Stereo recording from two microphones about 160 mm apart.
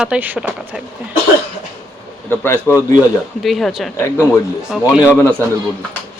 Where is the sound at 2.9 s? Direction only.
Centre (ahead or behind).